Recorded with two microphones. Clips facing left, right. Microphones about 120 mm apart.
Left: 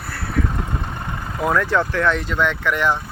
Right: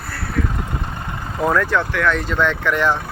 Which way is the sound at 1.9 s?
25° left (ahead or behind).